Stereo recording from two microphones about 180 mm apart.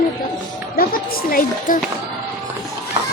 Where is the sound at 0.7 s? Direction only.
55° left (ahead or behind).